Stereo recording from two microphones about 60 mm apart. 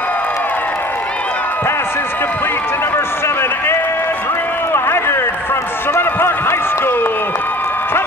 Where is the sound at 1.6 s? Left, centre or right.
Left.